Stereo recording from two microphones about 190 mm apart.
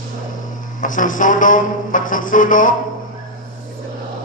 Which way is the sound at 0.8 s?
45° left (ahead or behind).